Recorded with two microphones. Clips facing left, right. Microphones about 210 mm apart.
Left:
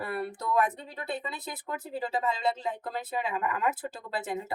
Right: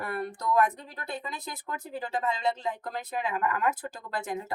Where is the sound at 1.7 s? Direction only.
20° left (ahead or behind).